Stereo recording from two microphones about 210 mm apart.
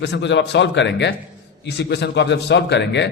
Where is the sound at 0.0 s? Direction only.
55° left (ahead or behind).